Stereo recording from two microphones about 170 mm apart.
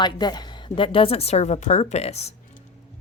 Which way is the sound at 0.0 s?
25° left (ahead or behind).